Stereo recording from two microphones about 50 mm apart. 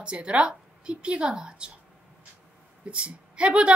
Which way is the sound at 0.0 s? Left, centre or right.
Right.